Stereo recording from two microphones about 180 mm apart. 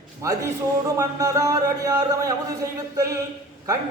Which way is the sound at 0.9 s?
20° right (ahead or behind).